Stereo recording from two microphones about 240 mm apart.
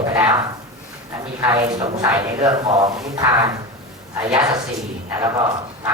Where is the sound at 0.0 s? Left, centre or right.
Centre.